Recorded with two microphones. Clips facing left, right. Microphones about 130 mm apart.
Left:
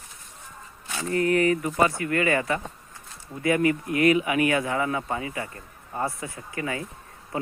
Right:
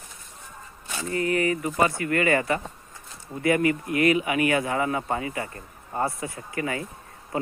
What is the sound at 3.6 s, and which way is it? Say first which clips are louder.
Speech: left 1 dB; 30° left (ahead or behind).